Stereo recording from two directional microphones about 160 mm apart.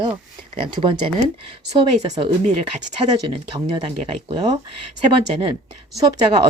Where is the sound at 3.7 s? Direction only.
30° right (ahead or behind).